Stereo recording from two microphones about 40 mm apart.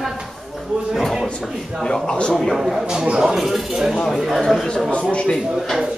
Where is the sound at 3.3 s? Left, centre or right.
Centre.